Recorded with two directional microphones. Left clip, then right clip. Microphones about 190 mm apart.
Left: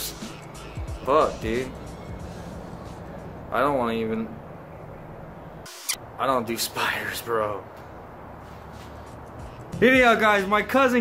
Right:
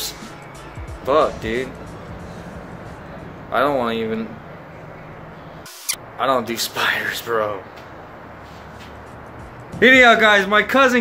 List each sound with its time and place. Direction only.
1.0 s a man's voice: 5° left (ahead or behind)
3.5 s a man's voice: centre (ahead or behind)
5.9 s speech: centre (ahead or behind)
9.8 s a man's voice: 5° left (ahead or behind)